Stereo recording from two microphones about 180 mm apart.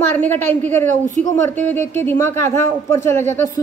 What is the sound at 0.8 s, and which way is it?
Speech, 45° right (ahead or behind).